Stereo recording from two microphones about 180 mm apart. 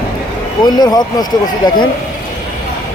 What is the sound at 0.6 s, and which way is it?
Speech, 20° left (ahead or behind).